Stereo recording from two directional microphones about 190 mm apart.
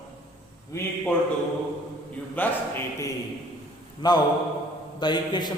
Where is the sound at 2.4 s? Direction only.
10° left (ahead or behind).